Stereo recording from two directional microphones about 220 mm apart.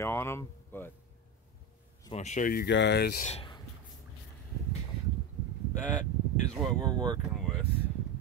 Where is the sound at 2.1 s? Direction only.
35° left (ahead or behind).